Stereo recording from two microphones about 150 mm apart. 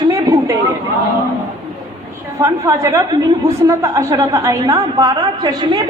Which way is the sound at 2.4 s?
20° right (ahead or behind).